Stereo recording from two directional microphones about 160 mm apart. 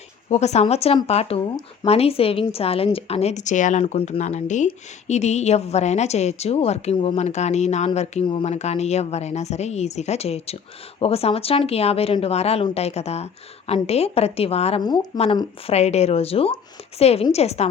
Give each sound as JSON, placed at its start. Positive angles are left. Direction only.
{"t": 0.3, "sound": "a woman's voice", "side_deg": 45}
{"t": 14.8, "sound": "speech", "side_deg": 30}